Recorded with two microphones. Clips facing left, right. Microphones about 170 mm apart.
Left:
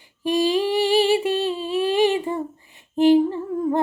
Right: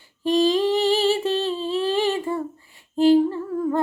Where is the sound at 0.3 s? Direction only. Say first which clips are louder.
Right 1 dB; 10° left (ahead or behind).